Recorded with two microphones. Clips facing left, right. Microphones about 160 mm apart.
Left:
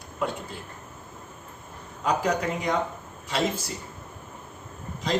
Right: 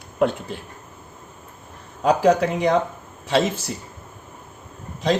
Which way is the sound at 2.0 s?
80° right.